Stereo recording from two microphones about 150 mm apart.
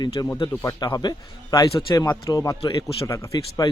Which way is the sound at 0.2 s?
25° left (ahead or behind).